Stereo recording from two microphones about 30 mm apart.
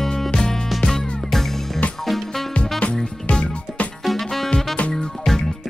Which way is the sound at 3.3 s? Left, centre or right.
Left.